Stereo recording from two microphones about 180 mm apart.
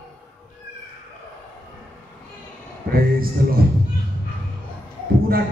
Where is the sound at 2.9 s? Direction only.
55° right (ahead or behind).